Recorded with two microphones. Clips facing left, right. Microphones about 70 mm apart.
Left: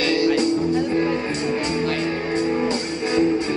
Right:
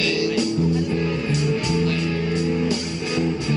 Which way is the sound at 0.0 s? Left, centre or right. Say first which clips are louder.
Left 3 dB; left.